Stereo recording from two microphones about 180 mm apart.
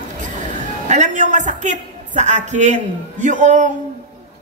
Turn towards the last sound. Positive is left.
turn(degrees=-45)  # may be behind; listen again after turning